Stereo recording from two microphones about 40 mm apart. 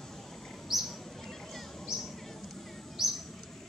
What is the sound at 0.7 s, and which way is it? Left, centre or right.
Bird, centre.